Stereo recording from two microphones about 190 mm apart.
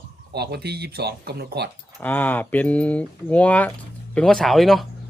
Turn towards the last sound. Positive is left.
turn(degrees=0)  # may be behind; listen again after turning